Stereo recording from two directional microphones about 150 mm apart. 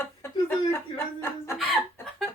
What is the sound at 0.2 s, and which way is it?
Chuckle, 15° left (ahead or behind).